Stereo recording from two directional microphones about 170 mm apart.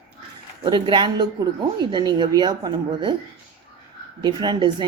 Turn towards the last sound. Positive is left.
turn(degrees=-25)  # may be behind; listen again after turning